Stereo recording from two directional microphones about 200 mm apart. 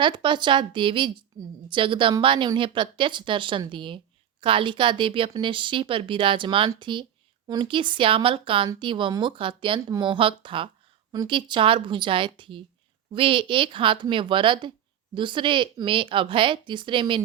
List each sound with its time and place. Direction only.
0.0 s a woman's voice: 25° right (ahead or behind)